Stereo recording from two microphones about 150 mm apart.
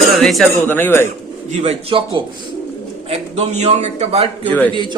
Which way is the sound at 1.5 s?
45° right (ahead or behind).